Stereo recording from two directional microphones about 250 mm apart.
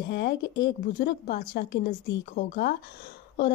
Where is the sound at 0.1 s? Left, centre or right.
Left.